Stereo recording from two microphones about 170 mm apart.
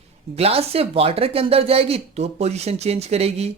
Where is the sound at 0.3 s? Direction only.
35° right (ahead or behind).